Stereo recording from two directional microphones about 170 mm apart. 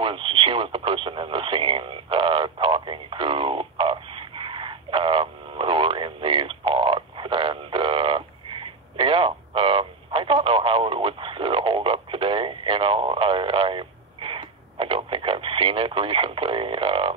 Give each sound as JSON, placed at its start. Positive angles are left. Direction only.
{"t": 0.0, "sound": "radio", "side_deg": -30}